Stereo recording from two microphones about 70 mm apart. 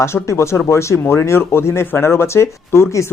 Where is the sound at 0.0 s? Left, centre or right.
Left.